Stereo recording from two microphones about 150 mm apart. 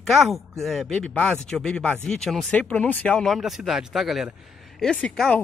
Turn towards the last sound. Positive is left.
turn(degrees=5)  # may be behind; listen again after turning